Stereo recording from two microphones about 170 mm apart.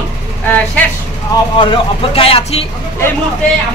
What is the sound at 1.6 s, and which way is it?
Speech, 30° left (ahead or behind).